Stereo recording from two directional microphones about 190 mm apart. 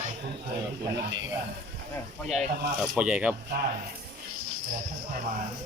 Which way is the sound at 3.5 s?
55° right (ahead or behind).